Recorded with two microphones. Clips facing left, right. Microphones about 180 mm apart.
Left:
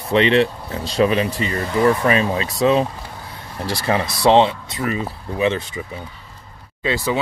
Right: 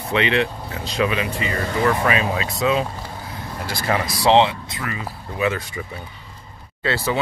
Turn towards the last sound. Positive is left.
turn(degrees=15)  # may be behind; listen again after turning